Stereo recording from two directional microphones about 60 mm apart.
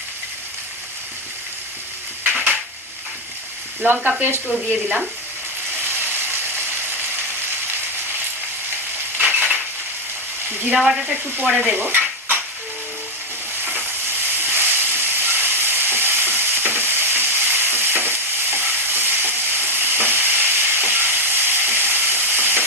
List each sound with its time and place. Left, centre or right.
2.2 s a sound: right
3.8 s frying: right
5.8 s ratchet: right
9.1 s crushing: right
10.8 s speech: centre
11.1 s stir: right
13.7 s steam: right